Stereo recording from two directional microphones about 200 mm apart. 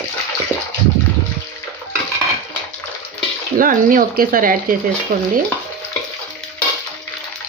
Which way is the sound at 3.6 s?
45° right (ahead or behind).